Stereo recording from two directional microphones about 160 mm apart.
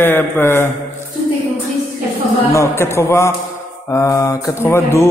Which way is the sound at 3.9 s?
20° left (ahead or behind).